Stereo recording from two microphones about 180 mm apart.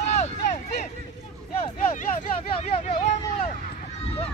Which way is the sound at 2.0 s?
40° left (ahead or behind).